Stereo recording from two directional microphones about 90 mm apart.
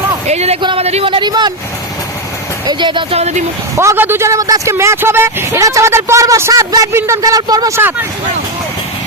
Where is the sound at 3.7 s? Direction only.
35° right (ahead or behind).